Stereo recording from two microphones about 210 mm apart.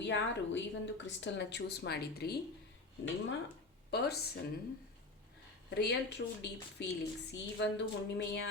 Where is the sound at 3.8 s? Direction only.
50° left (ahead or behind).